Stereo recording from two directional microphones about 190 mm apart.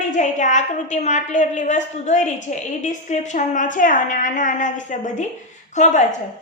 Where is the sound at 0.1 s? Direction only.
40° left (ahead or behind).